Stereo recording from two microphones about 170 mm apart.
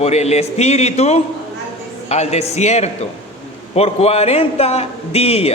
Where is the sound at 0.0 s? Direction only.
40° left (ahead or behind).